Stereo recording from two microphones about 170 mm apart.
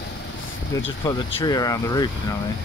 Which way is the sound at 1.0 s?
25° left (ahead or behind).